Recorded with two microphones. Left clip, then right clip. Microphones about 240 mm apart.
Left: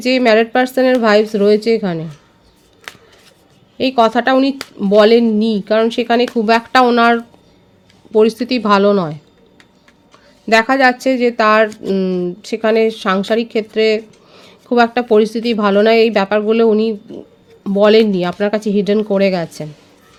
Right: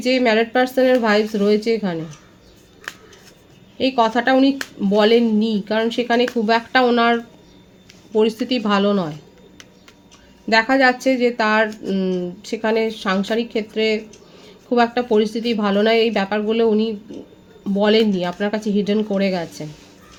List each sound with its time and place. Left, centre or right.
0.0 s speech: left
3.8 s speech: left
10.4 s speech: left